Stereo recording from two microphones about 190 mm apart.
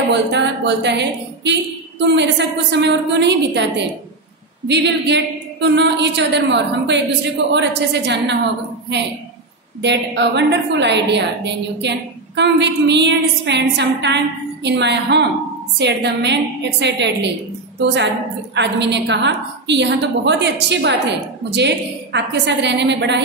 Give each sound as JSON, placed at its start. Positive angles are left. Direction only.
{"t": 0.1, "sound": "a woman's voice", "side_deg": -65}
{"t": 9.8, "sound": "a woman's voice", "side_deg": -65}
{"t": 22.1, "sound": "a woman's voice", "side_deg": -65}